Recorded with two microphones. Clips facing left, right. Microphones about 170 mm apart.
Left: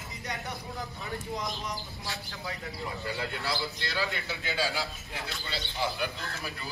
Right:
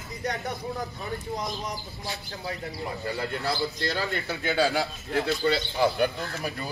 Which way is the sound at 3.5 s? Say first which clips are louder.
Right 6 dB; 40° right (ahead or behind).